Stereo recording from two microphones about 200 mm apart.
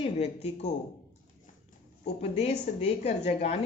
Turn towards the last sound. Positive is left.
turn(degrees=35)  # may be behind; listen again after turning